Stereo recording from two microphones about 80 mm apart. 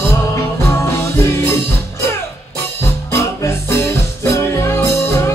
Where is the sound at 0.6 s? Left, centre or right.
Left.